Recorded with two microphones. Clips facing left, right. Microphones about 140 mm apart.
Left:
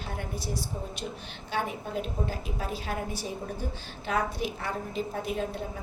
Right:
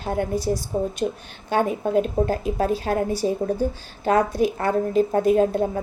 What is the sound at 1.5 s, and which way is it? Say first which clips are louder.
A woman's voice: right 11 dB; 50° right (ahead or behind).